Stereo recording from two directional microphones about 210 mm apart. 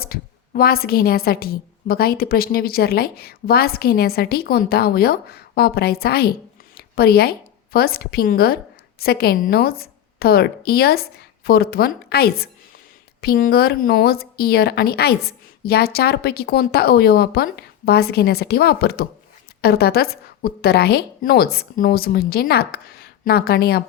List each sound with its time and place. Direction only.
0.0 s a woman's voice: 45° left (ahead or behind)